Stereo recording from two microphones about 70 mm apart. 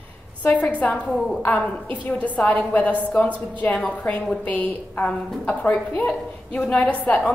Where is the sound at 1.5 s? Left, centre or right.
Left.